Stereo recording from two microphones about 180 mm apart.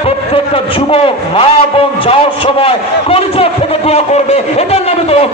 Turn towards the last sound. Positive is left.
turn(degrees=35)  # may be behind; listen again after turning